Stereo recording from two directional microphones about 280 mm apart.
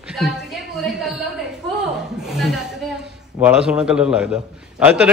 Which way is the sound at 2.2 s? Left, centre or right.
Centre.